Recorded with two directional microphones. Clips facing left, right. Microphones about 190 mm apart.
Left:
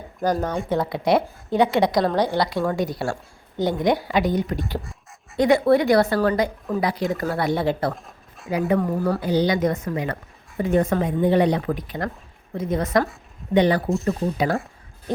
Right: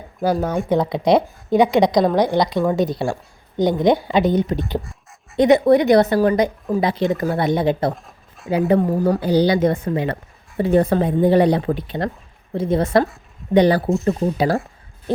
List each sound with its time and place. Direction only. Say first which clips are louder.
0.2 s a woman's voice: right 3 dB; 5° right (ahead or behind); by 4.6 s 20° right (ahead or behind)
4.8 s duck: right 1 dB; centre (ahead or behind)
5.4 s speech: right 4 dB; 20° right (ahead or behind)
7.9 s a sound: even; centre (ahead or behind)
8.7 s speech: right 4 dB; 30° right (ahead or behind)
13.8 s speech: right 4 dB; centre (ahead or behind)
14.1 s speech: right 4 dB; 35° right (ahead or behind)